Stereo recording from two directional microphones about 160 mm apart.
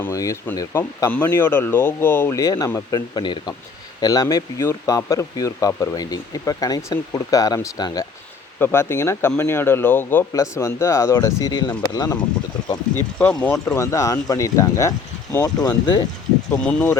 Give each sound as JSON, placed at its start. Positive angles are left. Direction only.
{"t": 0.0, "sound": "speech", "side_deg": 20}
{"t": 8.5, "sound": "speech", "side_deg": 15}
{"t": 13.0, "sound": "speech", "side_deg": 10}
{"t": 16.6, "sound": "speech", "side_deg": 10}